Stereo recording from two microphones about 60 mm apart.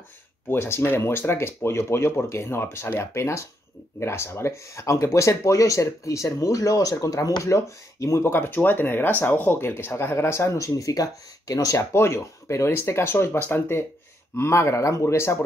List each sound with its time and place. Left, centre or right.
0.5 s speech: left
8.2 s speech: left
11.9 s speech: left